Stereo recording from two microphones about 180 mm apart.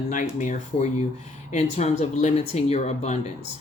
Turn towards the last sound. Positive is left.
turn(degrees=40)  # may be behind; listen again after turning